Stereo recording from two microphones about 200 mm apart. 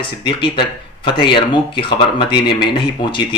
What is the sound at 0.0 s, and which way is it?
Speech, 25° left (ahead or behind).